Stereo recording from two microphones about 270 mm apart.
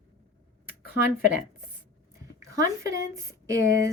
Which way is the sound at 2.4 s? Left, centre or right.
Centre.